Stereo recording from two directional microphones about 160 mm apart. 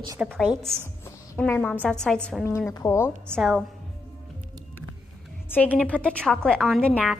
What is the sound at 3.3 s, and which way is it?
Speech, centre (ahead or behind).